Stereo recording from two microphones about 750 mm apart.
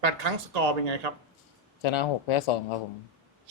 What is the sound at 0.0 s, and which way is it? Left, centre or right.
Speech, right.